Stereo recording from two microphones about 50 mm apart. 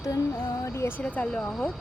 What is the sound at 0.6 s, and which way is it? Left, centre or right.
Music, left.